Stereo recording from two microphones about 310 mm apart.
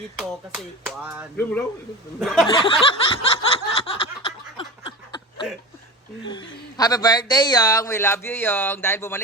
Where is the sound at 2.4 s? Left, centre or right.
Centre.